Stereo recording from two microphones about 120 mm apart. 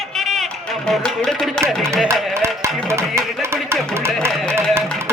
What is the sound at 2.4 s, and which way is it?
Music, 20° right (ahead or behind).